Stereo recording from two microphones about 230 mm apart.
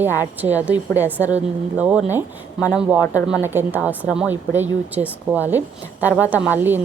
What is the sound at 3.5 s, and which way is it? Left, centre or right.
A woman's voice, centre.